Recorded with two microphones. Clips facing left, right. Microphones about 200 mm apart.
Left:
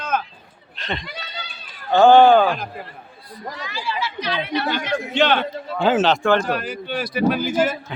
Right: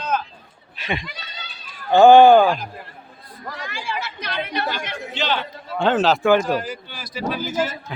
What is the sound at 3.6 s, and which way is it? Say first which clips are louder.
Chatter: left 2 dB; 50° right (ahead or behind).